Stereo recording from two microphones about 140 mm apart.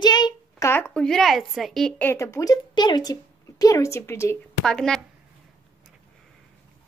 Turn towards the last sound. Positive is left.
turn(degrees=5)  # may be behind; listen again after turning